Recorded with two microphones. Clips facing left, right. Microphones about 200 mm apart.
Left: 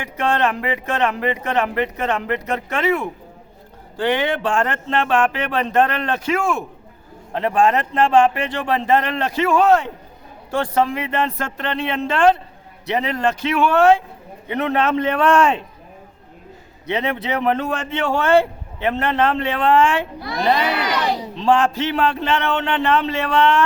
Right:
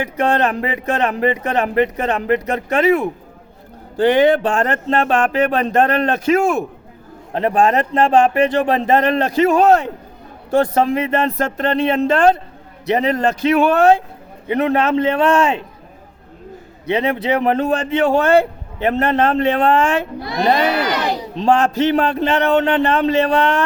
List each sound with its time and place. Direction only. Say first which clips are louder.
0.0 s a man's voice: right 3 dB; 40° right (ahead or behind); by 15.5 s 25° right (ahead or behind)
16.9 s a man's voice: right 5 dB; 30° right (ahead or behind)
20.5 s crowd: right 3 dB; 45° right (ahead or behind)
21.3 s a man's voice: right 3 dB; 40° right (ahead or behind)